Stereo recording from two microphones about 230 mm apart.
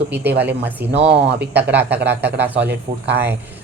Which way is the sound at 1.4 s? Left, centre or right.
Right.